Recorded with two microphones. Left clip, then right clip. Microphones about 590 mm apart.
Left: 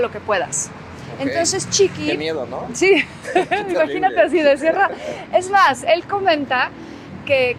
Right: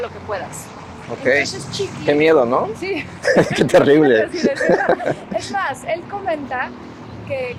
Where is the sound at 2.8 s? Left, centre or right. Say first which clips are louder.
Left 10 dB; left.